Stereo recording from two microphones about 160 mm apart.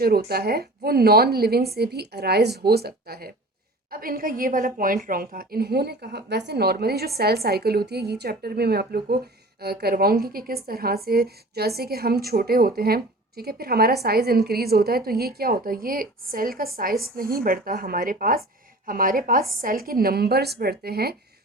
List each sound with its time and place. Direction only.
0.0 s speech: 75° right (ahead or behind)
4.0 s a woman's voice: 65° right (ahead or behind)